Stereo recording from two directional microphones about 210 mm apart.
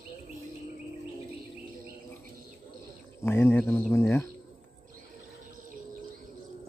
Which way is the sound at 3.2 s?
10° left (ahead or behind).